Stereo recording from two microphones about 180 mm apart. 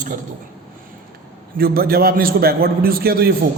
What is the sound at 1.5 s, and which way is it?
A man's voice, 55° right (ahead or behind).